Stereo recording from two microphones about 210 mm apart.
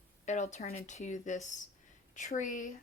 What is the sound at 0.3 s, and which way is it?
Speech, 35° left (ahead or behind).